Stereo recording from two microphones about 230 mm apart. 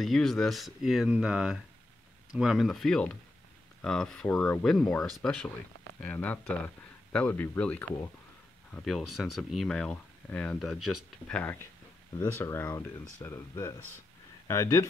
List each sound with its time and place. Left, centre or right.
0.0 s speech: centre
10.8 s speech: left
11.2 s speech: centre